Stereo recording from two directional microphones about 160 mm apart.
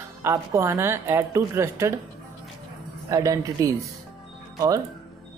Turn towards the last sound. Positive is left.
turn(degrees=-20)  # may be behind; listen again after turning